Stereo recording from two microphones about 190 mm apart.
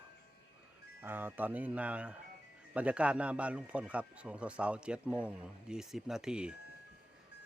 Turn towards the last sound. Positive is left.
turn(degrees=-5)  # may be behind; listen again after turning